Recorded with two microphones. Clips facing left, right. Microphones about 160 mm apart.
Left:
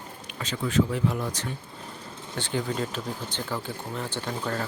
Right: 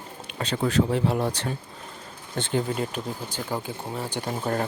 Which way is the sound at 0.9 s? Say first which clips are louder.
Right 4 dB; 30° right (ahead or behind).